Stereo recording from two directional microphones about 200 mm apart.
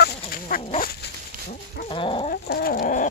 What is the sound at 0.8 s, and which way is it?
Dog, 50° left (ahead or behind).